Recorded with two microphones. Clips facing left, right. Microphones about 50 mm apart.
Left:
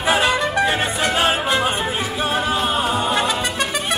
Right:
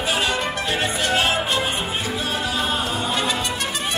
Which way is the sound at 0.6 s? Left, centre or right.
Left.